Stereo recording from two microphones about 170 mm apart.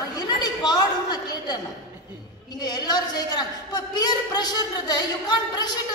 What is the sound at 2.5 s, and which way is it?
A woman's voice, 25° left (ahead or behind).